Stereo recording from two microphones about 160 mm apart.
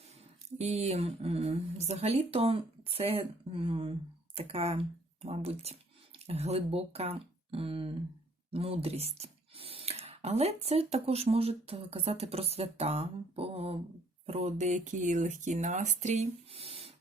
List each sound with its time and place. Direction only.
0.6 s speech: 45° right (ahead or behind)